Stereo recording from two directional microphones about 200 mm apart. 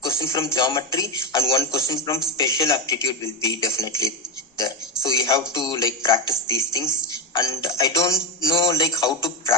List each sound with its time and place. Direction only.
0.0 s music: 15° left (ahead or behind)
5.0 s music: 15° left (ahead or behind)